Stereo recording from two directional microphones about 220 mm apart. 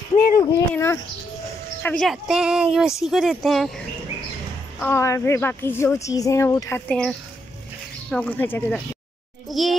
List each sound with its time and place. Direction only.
0.4 s a woman's voice: 15° left (ahead or behind)
1.8 s a woman's voice: 5° left (ahead or behind)